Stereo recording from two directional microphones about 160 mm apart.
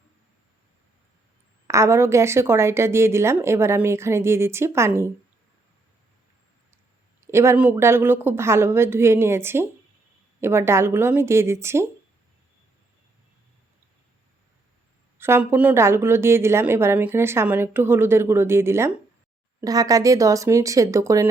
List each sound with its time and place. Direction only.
1.6 s speech: 20° right (ahead or behind)
7.2 s speech: 15° right (ahead or behind)
15.2 s speech: 15° right (ahead or behind)